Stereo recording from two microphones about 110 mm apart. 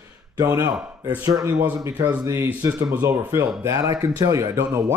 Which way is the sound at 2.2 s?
25° right (ahead or behind).